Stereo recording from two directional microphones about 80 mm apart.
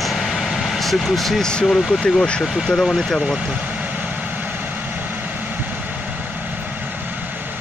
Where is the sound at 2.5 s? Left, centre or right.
Centre.